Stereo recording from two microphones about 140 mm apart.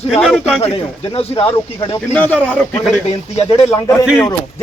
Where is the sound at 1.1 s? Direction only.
45° left (ahead or behind).